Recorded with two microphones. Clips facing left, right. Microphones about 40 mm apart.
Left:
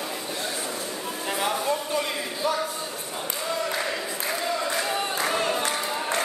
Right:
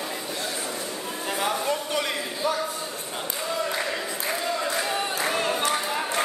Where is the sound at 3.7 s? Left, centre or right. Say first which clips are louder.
Even; centre.